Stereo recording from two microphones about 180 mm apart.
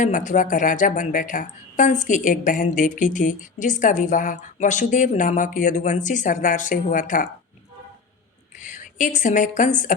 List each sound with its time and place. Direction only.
0.0 s speech: 45° left (ahead or behind)
8.5 s speech: 45° left (ahead or behind)